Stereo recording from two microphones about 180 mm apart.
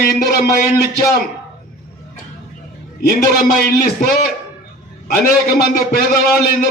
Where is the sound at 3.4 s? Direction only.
55° left (ahead or behind).